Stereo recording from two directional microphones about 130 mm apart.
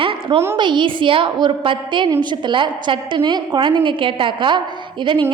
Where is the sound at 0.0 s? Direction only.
45° right (ahead or behind).